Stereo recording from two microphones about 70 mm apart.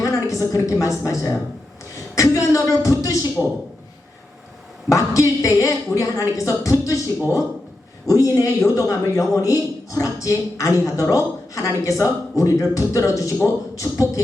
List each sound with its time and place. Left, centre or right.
0.0 s a woman's voice: left
2.1 s music: left
3.4 s a man's voice: left
4.9 s a man's voice: left